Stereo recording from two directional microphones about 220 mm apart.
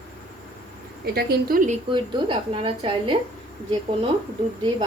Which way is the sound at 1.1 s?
45° right (ahead or behind).